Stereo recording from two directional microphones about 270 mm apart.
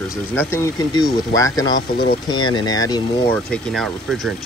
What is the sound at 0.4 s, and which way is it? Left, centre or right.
Speech, centre.